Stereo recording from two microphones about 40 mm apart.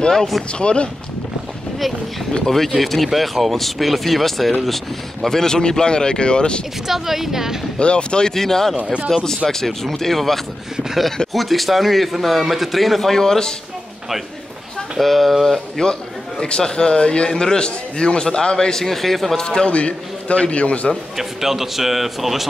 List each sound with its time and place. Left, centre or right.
0.1 s speech: centre
0.5 s a man's voice: left
2.4 s speech: centre; by 6.6 s left
6.9 s a woman's voice: centre
7.8 s a man's voice: left
8.3 s speech: centre
15.0 s speech: centre
15.8 s a man's voice: centre
19.4 s a man's voice: centre
19.7 s a man's voice: left
21.2 s speech: centre